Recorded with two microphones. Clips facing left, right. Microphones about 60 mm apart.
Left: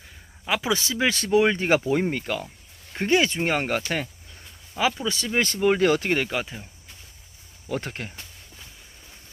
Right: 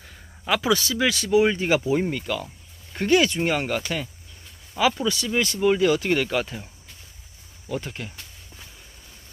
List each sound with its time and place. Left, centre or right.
0.0 s a sound: centre
0.7 s speech: left
1.1 s speech: left
5.0 s speech: left
6.0 s speech: centre
7.7 s speech: left